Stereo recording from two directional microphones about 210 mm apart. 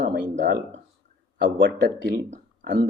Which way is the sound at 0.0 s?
45° right (ahead or behind).